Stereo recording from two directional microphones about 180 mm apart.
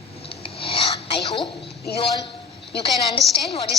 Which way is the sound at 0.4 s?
30° left (ahead or behind).